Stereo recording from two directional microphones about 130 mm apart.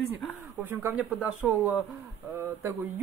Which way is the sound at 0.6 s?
15° right (ahead or behind).